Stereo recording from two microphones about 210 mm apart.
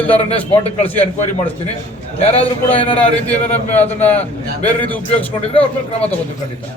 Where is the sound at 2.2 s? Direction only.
30° left (ahead or behind).